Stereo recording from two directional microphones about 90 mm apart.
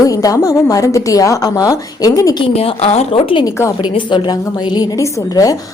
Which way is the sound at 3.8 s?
65° left (ahead or behind).